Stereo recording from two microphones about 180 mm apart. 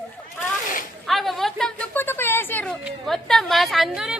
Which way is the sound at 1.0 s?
Centre (ahead or behind).